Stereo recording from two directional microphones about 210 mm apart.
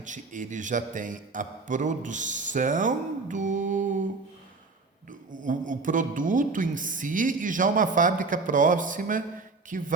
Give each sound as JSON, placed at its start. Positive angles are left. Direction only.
{"t": 0.0, "sound": "a man's voice", "side_deg": -35}
{"t": 5.4, "sound": "a man's voice", "side_deg": -40}